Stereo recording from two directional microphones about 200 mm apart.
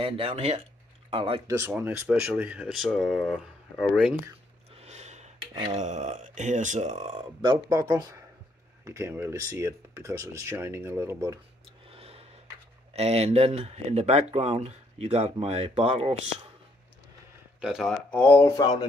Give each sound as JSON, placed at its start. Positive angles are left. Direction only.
{"t": 0.0, "sound": "speech", "side_deg": -30}
{"t": 1.5, "sound": "speech", "side_deg": -10}
{"t": 4.7, "sound": "a sound", "side_deg": -35}
{"t": 5.5, "sound": "speech", "side_deg": -20}
{"t": 5.8, "sound": "speech", "side_deg": -35}
{"t": 7.7, "sound": "speech", "side_deg": -15}
{"t": 11.9, "sound": "a sound", "side_deg": -30}
{"t": 12.9, "sound": "speech", "side_deg": -30}
{"t": 17.6, "sound": "speech", "side_deg": 0}